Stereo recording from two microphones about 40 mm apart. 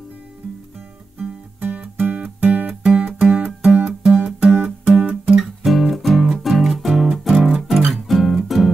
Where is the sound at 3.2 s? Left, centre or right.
Right.